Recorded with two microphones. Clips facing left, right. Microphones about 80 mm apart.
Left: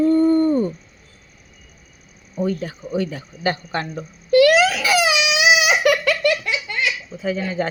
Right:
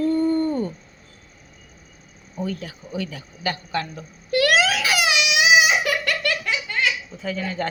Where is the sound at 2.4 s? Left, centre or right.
Left.